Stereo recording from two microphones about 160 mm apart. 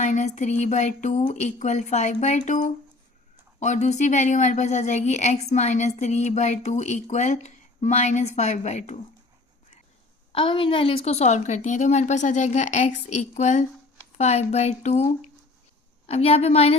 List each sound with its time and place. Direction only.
0.0 s a woman's voice: 50° left (ahead or behind)
10.3 s a woman's voice: 30° left (ahead or behind)